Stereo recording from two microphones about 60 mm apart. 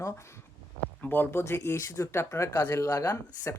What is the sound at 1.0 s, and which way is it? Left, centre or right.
Speech, left.